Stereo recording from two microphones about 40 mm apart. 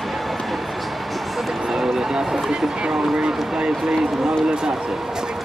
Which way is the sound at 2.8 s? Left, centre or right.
Right.